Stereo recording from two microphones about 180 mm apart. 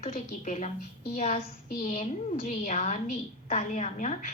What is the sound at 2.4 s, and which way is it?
A woman's voice, 40° left (ahead or behind).